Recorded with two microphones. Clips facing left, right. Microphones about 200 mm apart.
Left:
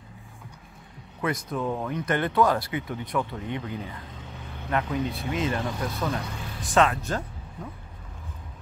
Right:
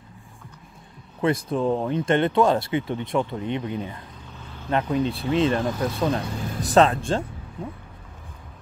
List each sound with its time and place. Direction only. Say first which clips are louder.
1.2 s speech: right 6 dB; 30° right (ahead or behind)